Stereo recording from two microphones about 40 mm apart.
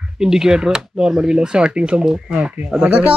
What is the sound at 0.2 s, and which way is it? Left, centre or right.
Speech, centre.